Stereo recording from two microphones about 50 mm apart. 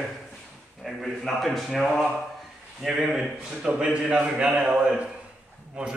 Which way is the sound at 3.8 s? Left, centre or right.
Right.